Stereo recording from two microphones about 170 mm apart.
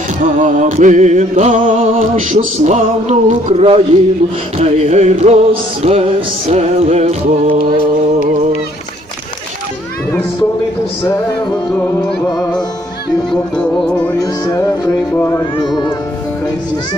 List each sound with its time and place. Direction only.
0.2 s music: 50° right (ahead or behind)
13.3 s music: 5° left (ahead or behind)
14.2 s speech: 20° left (ahead or behind)